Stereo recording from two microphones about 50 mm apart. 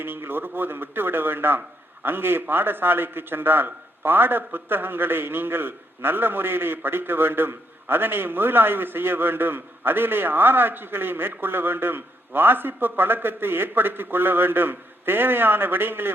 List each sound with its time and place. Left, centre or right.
0.0 s a man's voice: right